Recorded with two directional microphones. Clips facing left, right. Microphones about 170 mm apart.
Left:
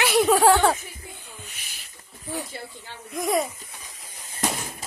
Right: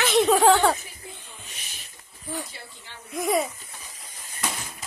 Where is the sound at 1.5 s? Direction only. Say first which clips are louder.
Right 2 dB; 25° right (ahead or behind).